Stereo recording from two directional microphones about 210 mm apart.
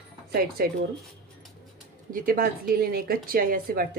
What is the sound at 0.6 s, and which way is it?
Speech, 45° right (ahead or behind).